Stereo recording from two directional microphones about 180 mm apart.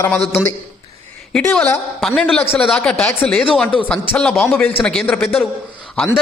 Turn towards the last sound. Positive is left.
turn(degrees=5)  # may be behind; listen again after turning